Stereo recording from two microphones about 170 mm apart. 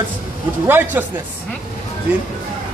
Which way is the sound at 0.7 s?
10° right (ahead or behind).